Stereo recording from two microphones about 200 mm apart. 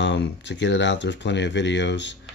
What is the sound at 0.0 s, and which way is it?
Speech, 65° left (ahead or behind).